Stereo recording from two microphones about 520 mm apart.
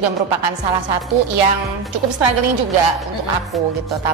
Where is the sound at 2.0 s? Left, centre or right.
Right.